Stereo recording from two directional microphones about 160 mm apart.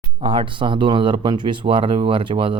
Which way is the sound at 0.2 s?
30° right (ahead or behind).